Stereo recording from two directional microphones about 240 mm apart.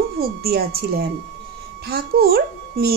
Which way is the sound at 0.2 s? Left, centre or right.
Right.